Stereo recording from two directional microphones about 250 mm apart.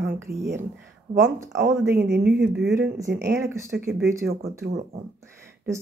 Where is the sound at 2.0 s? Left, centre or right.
Right.